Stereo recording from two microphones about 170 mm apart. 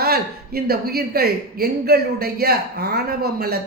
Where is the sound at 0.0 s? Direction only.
65° right (ahead or behind).